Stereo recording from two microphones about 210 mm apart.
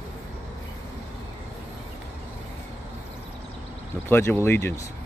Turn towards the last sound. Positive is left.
turn(degrees=10)  # may be behind; listen again after turning